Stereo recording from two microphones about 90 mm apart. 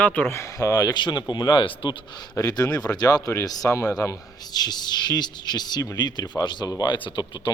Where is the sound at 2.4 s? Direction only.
40° left (ahead or behind).